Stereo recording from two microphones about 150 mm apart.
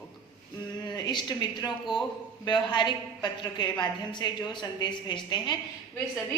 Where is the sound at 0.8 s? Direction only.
30° left (ahead or behind).